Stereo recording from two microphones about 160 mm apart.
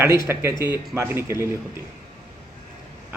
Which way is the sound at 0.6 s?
15° right (ahead or behind).